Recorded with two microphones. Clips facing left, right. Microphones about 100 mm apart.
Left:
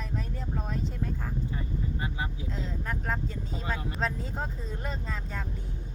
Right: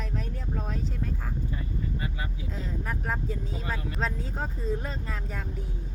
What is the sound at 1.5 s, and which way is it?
Speech, 25° left (ahead or behind).